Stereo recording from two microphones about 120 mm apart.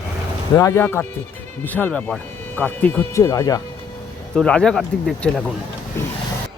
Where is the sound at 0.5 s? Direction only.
25° left (ahead or behind).